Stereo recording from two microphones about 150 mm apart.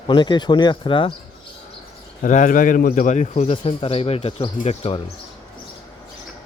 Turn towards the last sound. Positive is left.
turn(degrees=45)  # may be behind; listen again after turning